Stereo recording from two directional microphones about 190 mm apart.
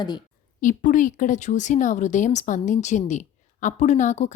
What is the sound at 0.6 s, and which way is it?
Speech, 45° left (ahead or behind).